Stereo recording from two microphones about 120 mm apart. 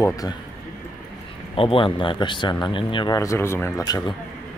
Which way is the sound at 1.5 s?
45° left (ahead or behind).